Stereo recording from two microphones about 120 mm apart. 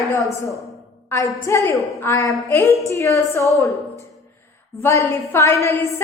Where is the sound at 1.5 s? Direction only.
25° left (ahead or behind).